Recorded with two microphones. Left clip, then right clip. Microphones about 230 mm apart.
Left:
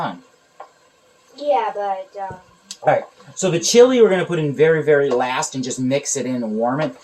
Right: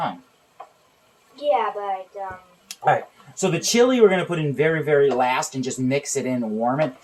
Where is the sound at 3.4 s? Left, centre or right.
Right.